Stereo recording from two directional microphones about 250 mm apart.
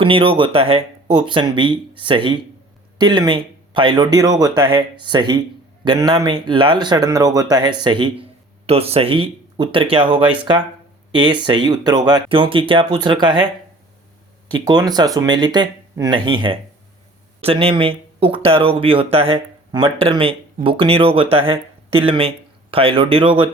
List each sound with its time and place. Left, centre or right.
0.0 s speech: right
14.5 s speech: centre